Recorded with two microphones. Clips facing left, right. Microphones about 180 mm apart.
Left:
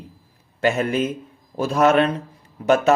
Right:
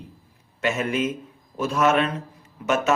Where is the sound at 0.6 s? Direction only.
35° left (ahead or behind).